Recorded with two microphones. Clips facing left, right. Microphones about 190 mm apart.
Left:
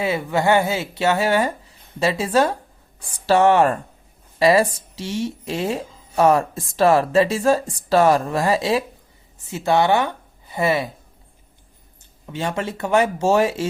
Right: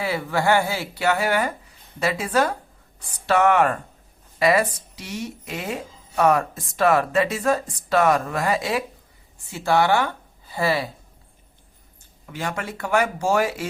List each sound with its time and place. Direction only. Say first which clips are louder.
0.0 s speech: left 3 dB; 20° left (ahead or behind)
12.2 s speech: left 4 dB; 25° left (ahead or behind)